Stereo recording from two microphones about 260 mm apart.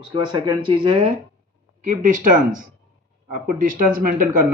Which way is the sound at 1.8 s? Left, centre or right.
Right.